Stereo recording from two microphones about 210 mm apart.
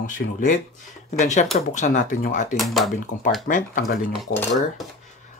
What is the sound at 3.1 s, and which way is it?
Speech, 50° left (ahead or behind).